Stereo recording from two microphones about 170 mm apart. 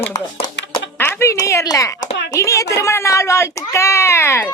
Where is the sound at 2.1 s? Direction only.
90° left.